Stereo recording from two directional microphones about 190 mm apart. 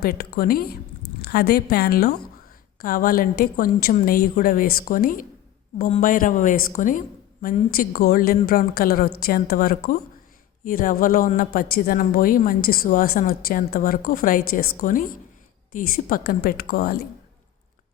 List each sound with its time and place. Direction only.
0.0 s a woman's voice: 55° left (ahead or behind)